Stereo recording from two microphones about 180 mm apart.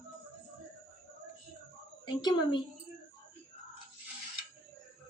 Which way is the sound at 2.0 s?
25° left (ahead or behind).